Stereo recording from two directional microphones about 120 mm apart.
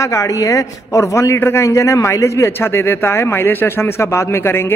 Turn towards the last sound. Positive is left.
turn(degrees=20)  # may be behind; listen again after turning